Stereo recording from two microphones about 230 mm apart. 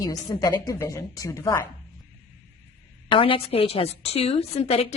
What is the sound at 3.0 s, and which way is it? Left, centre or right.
A woman's voice, left.